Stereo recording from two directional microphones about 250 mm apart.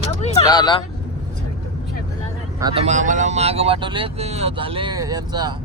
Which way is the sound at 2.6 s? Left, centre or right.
Right.